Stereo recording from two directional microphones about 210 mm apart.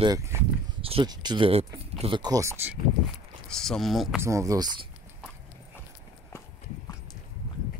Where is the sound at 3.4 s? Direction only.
5° left (ahead or behind).